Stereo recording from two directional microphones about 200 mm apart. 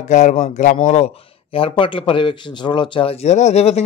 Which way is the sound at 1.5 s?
25° left (ahead or behind).